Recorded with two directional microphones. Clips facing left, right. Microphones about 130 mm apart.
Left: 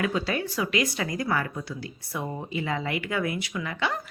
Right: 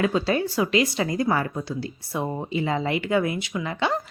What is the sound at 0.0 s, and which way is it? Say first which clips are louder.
A woman's voice: right 5 dB; 30° right (ahead or behind).